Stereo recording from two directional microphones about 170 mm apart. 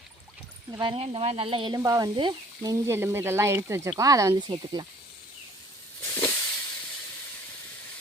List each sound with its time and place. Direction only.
0.7 s speech: 30° right (ahead or behind)
6.1 s hiss: 15° left (ahead or behind)